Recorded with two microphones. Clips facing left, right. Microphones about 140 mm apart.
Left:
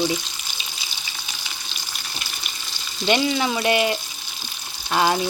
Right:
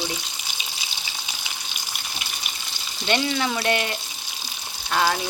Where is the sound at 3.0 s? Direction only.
10° left (ahead or behind).